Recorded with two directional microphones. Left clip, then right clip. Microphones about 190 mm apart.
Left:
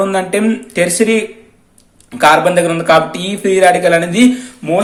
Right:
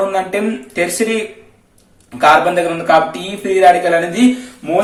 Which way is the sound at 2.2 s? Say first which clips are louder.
Left 1 dB; 35° left (ahead or behind).